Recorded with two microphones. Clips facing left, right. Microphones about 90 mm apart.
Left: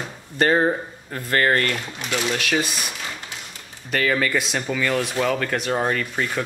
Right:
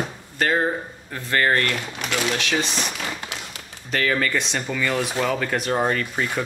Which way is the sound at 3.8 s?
5° left (ahead or behind).